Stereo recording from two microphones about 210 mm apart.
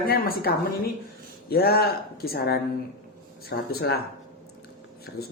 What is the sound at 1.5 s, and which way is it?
A woman's voice, 45° left (ahead or behind).